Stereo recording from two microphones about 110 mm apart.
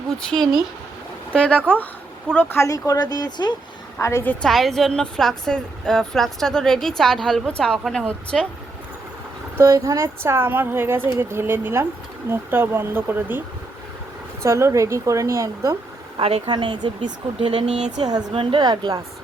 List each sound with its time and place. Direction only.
0.3 s a woman's voice: 5° left (ahead or behind)
2.6 s speech: 30° left (ahead or behind)
3.9 s a woman's voice: 20° left (ahead or behind)
4.4 s a woman's voice: 5° left (ahead or behind)
9.6 s a woman's voice: 30° right (ahead or behind)
14.4 s a woman's voice: 25° right (ahead or behind)
16.1 s speech: 60° right (ahead or behind)
16.5 s speech: 45° right (ahead or behind)
17.7 s a woman's voice: 90° right
18.0 s a woman's voice: 35° right (ahead or behind)